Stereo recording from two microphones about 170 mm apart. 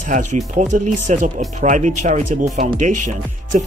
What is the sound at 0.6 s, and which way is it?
Speech, 50° right (ahead or behind).